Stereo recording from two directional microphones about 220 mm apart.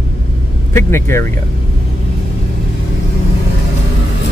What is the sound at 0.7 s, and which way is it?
Speech, 10° left (ahead or behind).